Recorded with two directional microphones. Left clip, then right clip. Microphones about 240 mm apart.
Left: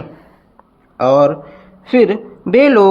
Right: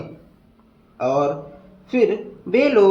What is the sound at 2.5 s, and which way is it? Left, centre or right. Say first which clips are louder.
Speech: left 7 dB; left.